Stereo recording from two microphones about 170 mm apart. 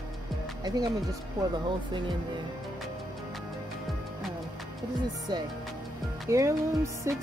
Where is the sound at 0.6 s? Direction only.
25° right (ahead or behind).